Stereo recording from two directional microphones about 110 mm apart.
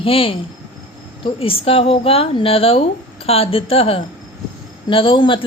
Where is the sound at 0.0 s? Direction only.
55° left (ahead or behind).